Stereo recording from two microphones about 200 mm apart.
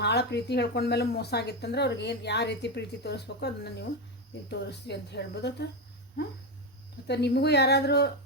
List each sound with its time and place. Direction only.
0.0 s speech: 55° left (ahead or behind)
7.1 s speech: 55° left (ahead or behind)